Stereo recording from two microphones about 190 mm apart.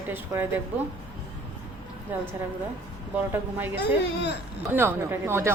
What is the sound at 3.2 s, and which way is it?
Speech, 10° right (ahead or behind).